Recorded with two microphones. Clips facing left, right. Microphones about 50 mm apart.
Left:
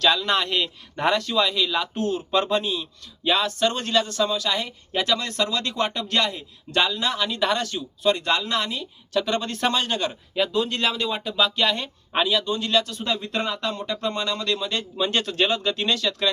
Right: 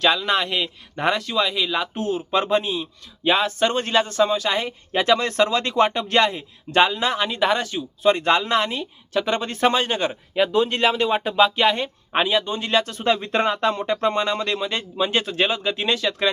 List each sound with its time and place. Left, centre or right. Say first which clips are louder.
0.0 s speech: right 1 dB; centre
8.1 s speech: right 6 dB; right